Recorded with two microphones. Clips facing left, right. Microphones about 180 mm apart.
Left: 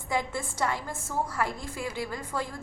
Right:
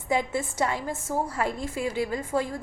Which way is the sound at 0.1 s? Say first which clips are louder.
Right 4 dB; 20° right (ahead or behind).